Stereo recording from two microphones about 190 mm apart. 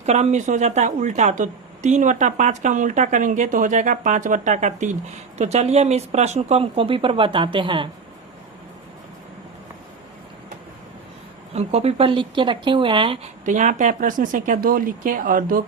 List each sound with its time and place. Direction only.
0.0 s speech: 35° right (ahead or behind)
11.5 s speech: 35° right (ahead or behind)
13.4 s speech: 40° right (ahead or behind)